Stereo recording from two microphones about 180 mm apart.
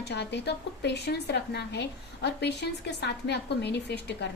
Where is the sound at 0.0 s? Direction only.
65° left (ahead or behind).